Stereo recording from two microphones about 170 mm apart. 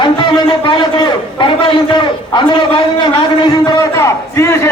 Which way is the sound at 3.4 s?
25° left (ahead or behind).